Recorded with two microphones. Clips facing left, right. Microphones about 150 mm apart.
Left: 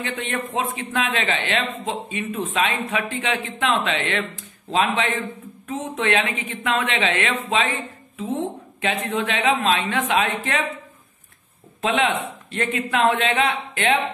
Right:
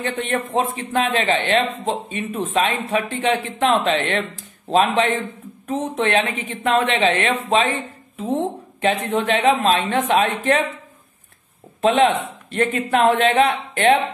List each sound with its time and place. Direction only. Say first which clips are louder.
0.0 s a man's voice: right 4 dB; 40° right (ahead or behind)
8.8 s a man's voice: right 4 dB; 40° right (ahead or behind)
11.8 s a man's voice: right 5 dB; 40° right (ahead or behind)